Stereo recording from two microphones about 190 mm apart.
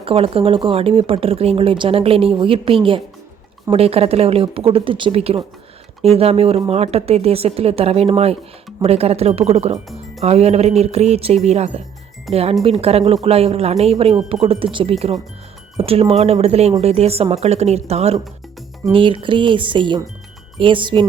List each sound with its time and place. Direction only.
0.0 s speech: 30° right (ahead or behind)